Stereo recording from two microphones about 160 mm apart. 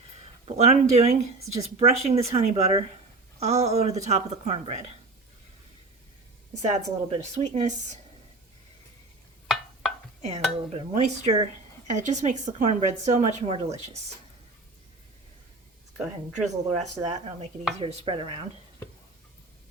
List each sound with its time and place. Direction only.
0.4 s speech: 45° right (ahead or behind)
6.5 s speech: 45° right (ahead or behind)
10.2 s speech: 45° right (ahead or behind)
16.3 s speech: 45° right (ahead or behind)
17.7 s stir: 35° right (ahead or behind)